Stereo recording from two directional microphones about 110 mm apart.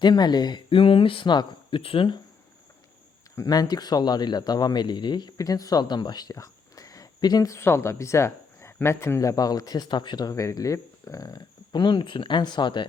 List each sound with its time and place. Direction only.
0.0 s speech: 40° left (ahead or behind)
0.7 s speech: 55° left (ahead or behind)
3.3 s speech: 35° left (ahead or behind)